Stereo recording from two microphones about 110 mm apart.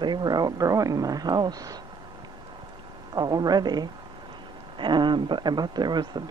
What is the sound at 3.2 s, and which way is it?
Speech, 40° right (ahead or behind).